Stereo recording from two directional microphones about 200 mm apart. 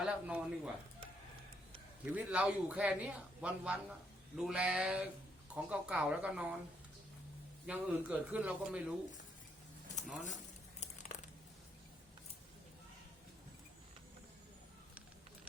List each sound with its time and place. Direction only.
0.0 s speech: 5° right (ahead or behind)
2.0 s speech: 5° right (ahead or behind)
7.7 s speech: 5° right (ahead or behind)
10.8 s crumpling: 35° left (ahead or behind)